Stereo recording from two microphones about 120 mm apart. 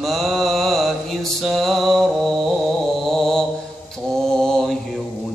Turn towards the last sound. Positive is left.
turn(degrees=5)  # may be behind; listen again after turning